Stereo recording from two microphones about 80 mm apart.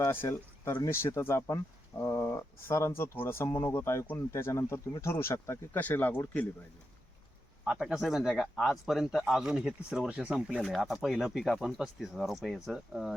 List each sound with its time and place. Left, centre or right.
0.0 s speech: left
7.6 s speech: centre
10.6 s speech: centre